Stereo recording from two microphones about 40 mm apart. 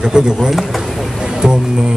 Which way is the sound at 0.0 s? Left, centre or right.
Centre.